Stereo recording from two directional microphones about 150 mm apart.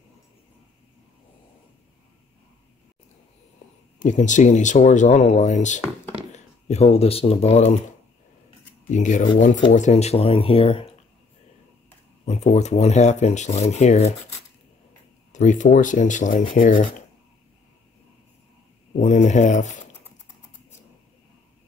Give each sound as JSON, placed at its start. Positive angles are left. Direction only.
{"t": 4.0, "sound": "speech", "side_deg": 55}
{"t": 8.8, "sound": "speech", "side_deg": 55}
{"t": 12.3, "sound": "speech", "side_deg": 50}
{"t": 15.3, "sound": "speech", "side_deg": 55}
{"t": 18.9, "sound": "speech", "side_deg": 50}